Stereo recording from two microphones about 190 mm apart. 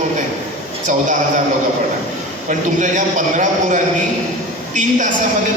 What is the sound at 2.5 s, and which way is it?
A man's voice, 40° right (ahead or behind).